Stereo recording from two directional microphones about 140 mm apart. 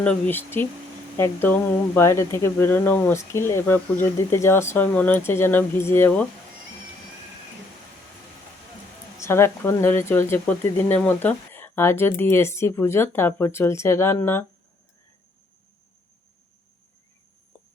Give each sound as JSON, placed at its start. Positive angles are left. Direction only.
{"t": 0.0, "sound": "speech", "side_deg": 10}
{"t": 9.1, "sound": "speech", "side_deg": 20}